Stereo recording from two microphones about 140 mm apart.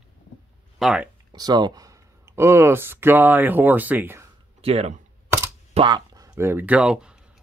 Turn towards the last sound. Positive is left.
turn(degrees=-5)  # may be behind; listen again after turning